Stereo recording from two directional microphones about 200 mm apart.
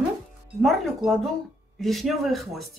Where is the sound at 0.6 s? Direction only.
Centre (ahead or behind).